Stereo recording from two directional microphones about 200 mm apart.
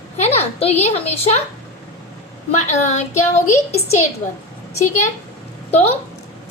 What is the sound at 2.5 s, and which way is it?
Speech, 35° left (ahead or behind).